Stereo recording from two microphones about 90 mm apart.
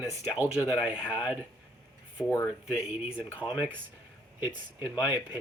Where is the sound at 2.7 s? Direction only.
5° right (ahead or behind).